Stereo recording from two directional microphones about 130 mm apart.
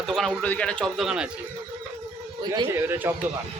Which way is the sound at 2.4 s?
35° right (ahead or behind).